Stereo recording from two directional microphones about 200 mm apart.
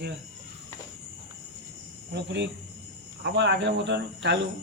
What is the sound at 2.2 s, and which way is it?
Speech, 60° right (ahead or behind).